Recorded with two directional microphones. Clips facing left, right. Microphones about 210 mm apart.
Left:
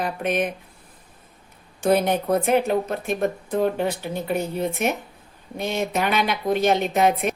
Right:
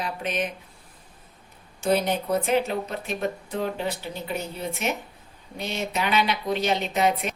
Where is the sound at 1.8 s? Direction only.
55° left (ahead or behind).